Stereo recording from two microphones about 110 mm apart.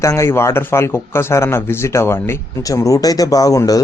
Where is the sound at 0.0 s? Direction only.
25° left (ahead or behind).